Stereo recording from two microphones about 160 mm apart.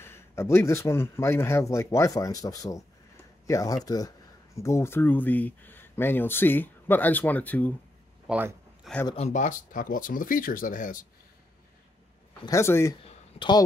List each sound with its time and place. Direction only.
0.0 s speech: 15° left (ahead or behind)
8.3 s speech: 10° right (ahead or behind)
9.1 s speech: 45° left (ahead or behind)
12.4 s speech: 15° left (ahead or behind)
13.0 s a sound: 30° left (ahead or behind)